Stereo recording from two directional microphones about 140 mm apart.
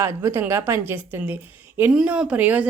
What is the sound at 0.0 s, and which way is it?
A woman's voice, 20° right (ahead or behind).